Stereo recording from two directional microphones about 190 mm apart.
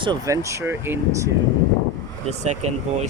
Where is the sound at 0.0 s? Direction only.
20° right (ahead or behind).